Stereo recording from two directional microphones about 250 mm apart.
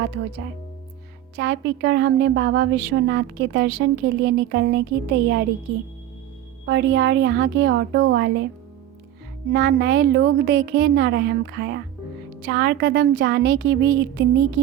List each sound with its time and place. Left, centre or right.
1.4 s a woman's voice: right
6.7 s a woman's voice: right
9.5 s a woman's voice: right